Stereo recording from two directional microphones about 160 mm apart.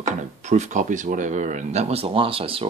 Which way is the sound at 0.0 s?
45° right (ahead or behind).